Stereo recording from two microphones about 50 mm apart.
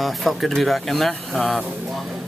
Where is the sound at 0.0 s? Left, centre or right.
Centre.